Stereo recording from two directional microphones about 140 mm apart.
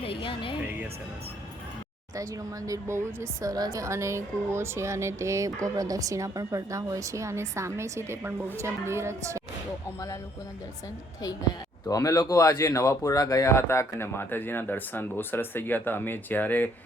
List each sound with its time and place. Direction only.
0.0 s music: 40° left (ahead or behind)
2.1 s speech: 25° right (ahead or behind)
11.9 s speech: 25° left (ahead or behind)